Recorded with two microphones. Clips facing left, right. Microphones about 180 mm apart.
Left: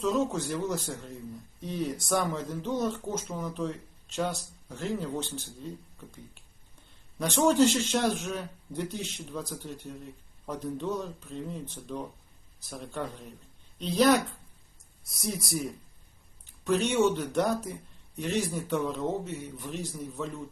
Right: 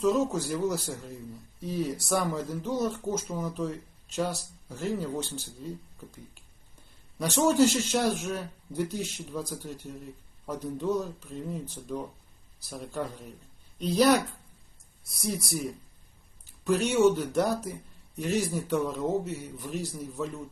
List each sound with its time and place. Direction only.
0.0 s a man's voice: centre (ahead or behind)
4.7 s a man's voice: 5° right (ahead or behind)
7.2 s a man's voice: 5° right (ahead or behind)
12.6 s a man's voice: centre (ahead or behind)